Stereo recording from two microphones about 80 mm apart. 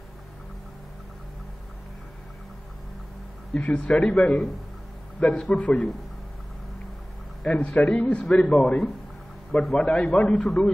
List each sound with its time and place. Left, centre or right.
3.5 s a man's voice: centre
7.4 s a man's voice: centre
9.5 s a man's voice: centre
9.8 s a man's voice: centre